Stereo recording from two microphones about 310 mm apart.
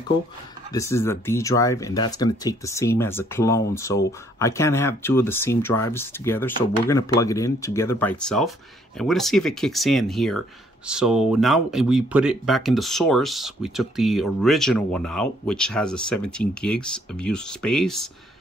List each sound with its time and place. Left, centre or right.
0.7 s speech: centre